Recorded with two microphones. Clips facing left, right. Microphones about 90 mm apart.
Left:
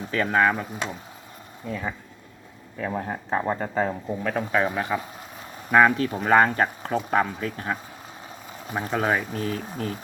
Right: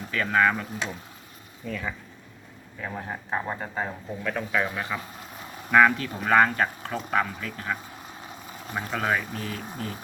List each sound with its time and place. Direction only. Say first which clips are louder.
0.1 s speech: left 1 dB; 30° left (ahead or behind)
2.8 s speech: left 5 dB; 45° left (ahead or behind); by 7.8 s 30° left (ahead or behind)
8.7 s speech: left 3 dB; 20° left (ahead or behind)
9.3 s speech: left 5 dB; 40° left (ahead or behind)